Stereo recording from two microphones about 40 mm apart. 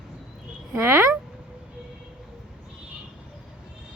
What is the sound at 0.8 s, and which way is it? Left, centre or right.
Speech, right.